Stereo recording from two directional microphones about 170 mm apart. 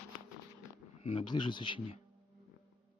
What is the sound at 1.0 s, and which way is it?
Speech, 35° left (ahead or behind).